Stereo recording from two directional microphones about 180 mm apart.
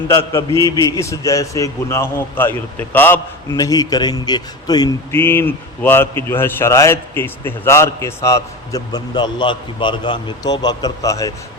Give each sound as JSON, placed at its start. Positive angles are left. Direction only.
{"t": 0.1, "sound": "a man's voice", "side_deg": 15}